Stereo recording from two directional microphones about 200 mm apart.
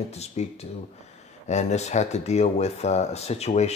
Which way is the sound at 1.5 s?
35° left (ahead or behind).